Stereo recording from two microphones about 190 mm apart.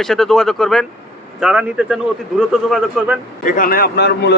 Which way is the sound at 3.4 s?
50° left (ahead or behind).